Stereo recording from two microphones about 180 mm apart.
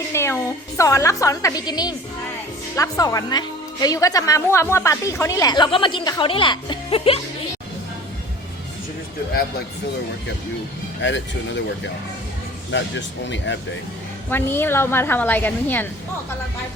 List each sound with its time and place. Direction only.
0.1 s a woman's voice: 15° left (ahead or behind); by 7.2 s 30° left (ahead or behind)
11.0 s speech: 90° left
13.2 s speech: 90° left
14.3 s a woman's voice: 10° left (ahead or behind)